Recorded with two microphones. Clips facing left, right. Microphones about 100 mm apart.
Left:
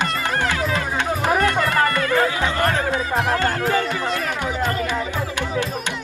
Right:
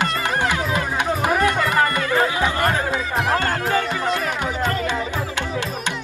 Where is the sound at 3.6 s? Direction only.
25° right (ahead or behind).